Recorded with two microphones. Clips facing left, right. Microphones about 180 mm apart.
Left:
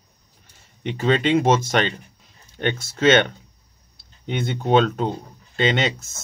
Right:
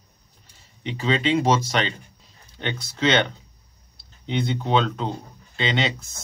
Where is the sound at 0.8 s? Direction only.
50° left (ahead or behind).